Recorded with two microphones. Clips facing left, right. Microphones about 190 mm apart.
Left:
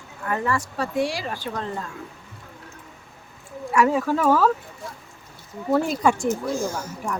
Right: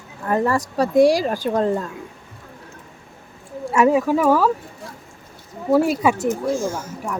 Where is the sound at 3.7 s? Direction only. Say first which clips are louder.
Right 4 dB; 15° right (ahead or behind).